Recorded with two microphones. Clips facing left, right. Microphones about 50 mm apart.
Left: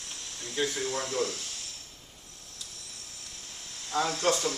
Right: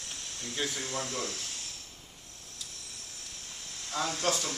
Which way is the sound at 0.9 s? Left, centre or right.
Left.